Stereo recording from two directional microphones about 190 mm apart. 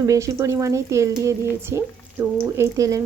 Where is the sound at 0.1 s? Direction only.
15° right (ahead or behind).